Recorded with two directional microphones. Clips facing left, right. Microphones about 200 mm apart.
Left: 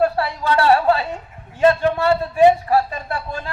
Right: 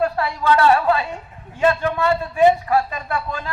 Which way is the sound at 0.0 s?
30° left (ahead or behind).